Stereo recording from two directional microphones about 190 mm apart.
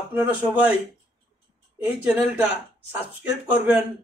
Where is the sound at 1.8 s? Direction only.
10° right (ahead or behind).